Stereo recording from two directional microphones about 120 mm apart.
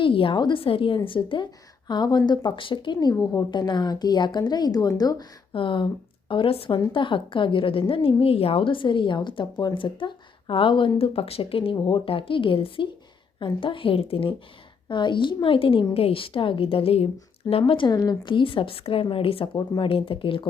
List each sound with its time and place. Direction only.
0.0 s a woman's voice: 45° left (ahead or behind); by 5.2 s 30° left (ahead or behind)
5.5 s a woman's voice: 45° left (ahead or behind)